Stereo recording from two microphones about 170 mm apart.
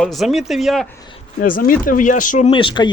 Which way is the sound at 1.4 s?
55° left (ahead or behind).